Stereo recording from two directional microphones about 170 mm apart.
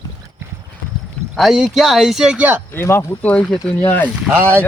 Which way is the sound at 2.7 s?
15° left (ahead or behind).